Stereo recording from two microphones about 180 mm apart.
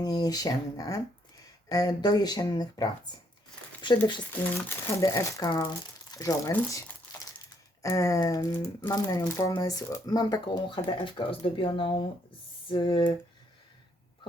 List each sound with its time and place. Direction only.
0.0 s speech: 20° left (ahead or behind)
4.3 s speech: 15° left (ahead or behind)